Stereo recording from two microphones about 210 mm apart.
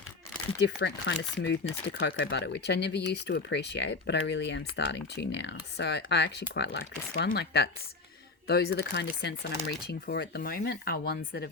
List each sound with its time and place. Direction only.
0.6 s speech: 55° left (ahead or behind)